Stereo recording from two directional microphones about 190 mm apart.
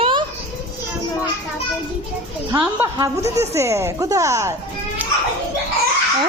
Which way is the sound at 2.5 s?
20° right (ahead or behind).